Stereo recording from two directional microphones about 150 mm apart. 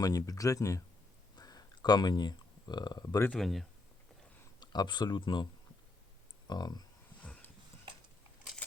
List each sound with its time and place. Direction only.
0.0 s speech: 25° left (ahead or behind)
1.4 s a sound: 25° left (ahead or behind)
3.2 s speech: centre (ahead or behind)
4.6 s speech: 30° left (ahead or behind)
6.5 s speech: 25° left (ahead or behind)
7.2 s dog: 10° left (ahead or behind)